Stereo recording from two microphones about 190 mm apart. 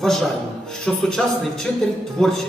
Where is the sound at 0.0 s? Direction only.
Centre (ahead or behind).